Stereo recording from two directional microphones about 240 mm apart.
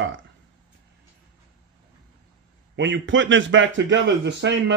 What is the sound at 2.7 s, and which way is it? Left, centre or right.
A man's voice, right.